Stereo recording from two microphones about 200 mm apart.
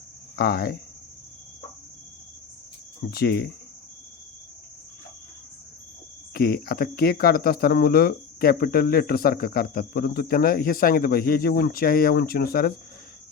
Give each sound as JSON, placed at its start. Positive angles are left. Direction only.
{"t": 0.3, "sound": "speech", "side_deg": 50}
{"t": 3.0, "sound": "speech", "side_deg": 50}
{"t": 6.3, "sound": "speech", "side_deg": 45}